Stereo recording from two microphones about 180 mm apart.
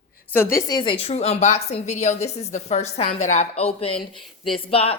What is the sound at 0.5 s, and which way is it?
A woman's voice, 20° left (ahead or behind).